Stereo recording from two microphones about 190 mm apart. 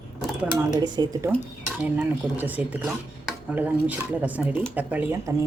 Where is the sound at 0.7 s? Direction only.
20° right (ahead or behind).